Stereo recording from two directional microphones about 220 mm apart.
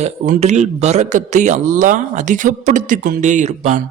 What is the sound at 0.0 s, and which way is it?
A man's voice, 30° right (ahead or behind).